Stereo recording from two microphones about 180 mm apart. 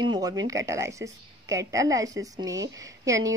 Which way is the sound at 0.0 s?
25° right (ahead or behind).